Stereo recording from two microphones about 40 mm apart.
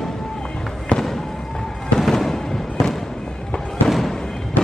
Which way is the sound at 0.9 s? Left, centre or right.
Left.